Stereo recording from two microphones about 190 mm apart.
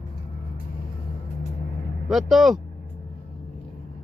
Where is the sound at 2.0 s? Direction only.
Centre (ahead or behind).